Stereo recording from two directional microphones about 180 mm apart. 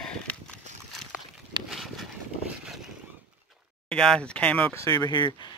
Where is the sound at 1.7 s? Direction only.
Centre (ahead or behind).